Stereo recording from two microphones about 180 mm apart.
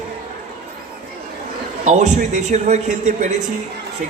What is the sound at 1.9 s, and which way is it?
A man's voice, 40° right (ahead or behind).